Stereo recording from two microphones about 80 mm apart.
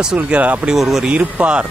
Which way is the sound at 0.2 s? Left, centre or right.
Centre.